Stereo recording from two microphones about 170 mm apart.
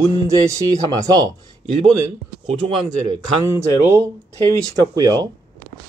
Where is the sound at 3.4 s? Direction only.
15° right (ahead or behind).